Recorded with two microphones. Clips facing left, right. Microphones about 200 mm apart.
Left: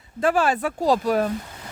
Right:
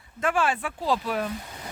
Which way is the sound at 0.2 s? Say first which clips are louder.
Left 5 dB; 35° left (ahead or behind).